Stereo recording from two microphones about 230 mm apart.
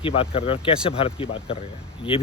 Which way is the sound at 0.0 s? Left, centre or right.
Left.